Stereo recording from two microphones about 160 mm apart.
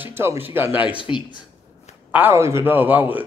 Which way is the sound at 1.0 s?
30° left (ahead or behind).